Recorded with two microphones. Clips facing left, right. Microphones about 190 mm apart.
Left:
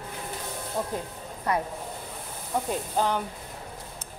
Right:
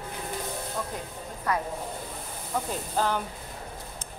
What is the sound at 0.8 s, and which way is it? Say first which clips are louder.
Music: left 6 dB; 25° left (ahead or behind).